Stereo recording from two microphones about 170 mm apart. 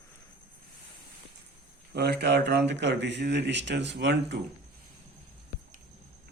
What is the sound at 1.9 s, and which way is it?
Speech, 75° right (ahead or behind).